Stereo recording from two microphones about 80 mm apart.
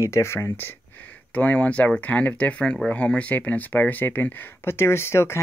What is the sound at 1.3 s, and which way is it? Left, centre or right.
Speech, centre.